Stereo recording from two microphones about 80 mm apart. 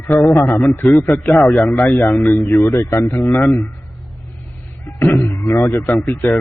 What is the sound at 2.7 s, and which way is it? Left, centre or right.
Speech, left.